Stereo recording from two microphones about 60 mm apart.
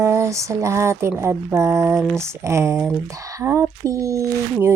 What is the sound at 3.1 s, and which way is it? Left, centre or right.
Speech, right.